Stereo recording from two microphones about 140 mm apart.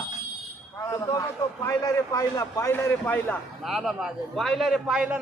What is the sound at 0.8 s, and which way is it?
A man's voice, 20° left (ahead or behind).